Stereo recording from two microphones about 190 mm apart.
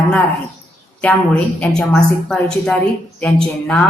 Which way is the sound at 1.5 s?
5° left (ahead or behind).